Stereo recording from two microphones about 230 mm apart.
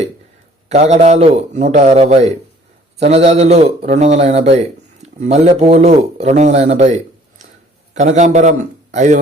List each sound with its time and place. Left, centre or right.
0.7 s a man's voice: right